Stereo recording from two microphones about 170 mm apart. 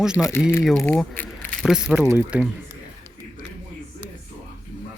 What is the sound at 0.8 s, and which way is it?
Speech, 10° left (ahead or behind).